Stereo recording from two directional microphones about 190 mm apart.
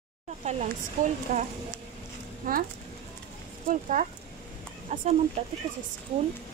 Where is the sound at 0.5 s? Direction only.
35° right (ahead or behind).